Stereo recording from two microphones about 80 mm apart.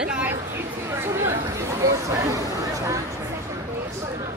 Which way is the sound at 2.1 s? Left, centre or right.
Right.